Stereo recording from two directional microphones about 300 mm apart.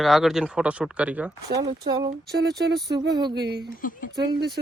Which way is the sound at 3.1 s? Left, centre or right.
Centre.